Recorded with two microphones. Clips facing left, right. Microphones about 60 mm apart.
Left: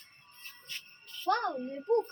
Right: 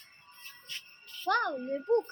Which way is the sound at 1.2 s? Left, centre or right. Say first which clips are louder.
Right 1 dB; right.